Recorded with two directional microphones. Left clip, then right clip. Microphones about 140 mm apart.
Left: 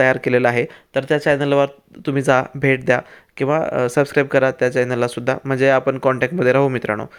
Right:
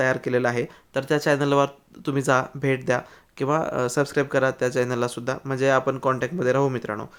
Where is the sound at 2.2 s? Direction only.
25° left (ahead or behind).